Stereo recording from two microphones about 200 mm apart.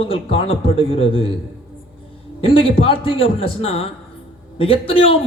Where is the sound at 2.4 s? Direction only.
25° left (ahead or behind).